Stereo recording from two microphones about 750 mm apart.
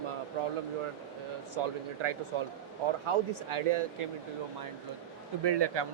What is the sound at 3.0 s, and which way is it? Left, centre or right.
Speech, right.